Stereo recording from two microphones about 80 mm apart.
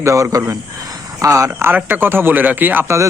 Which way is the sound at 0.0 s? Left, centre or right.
Right.